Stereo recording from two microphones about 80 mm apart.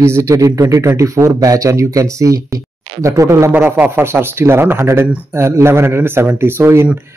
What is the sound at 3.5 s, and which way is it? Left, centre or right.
Speech, right.